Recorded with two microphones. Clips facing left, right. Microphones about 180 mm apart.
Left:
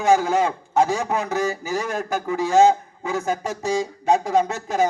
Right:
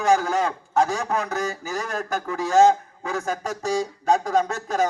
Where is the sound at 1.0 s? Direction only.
20° left (ahead or behind).